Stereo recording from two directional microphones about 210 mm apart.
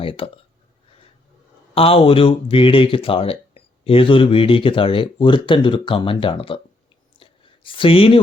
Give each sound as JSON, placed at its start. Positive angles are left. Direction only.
{"t": 0.0, "sound": "speech", "side_deg": 25}
{"t": 1.7, "sound": "speech", "side_deg": 25}
{"t": 7.2, "sound": "a sound", "side_deg": 25}